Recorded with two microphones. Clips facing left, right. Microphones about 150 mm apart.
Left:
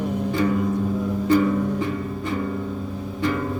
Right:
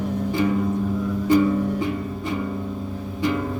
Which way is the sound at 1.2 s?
15° right (ahead or behind).